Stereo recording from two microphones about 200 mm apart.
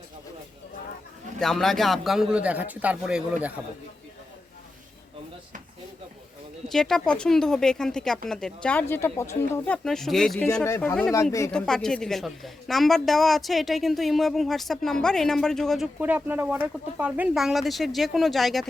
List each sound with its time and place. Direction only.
1.4 s a man's voice: centre (ahead or behind)
6.7 s a man's voice: centre (ahead or behind)
11.5 s a man's voice: 5° left (ahead or behind)
16.0 s a man's voice: 10° right (ahead or behind)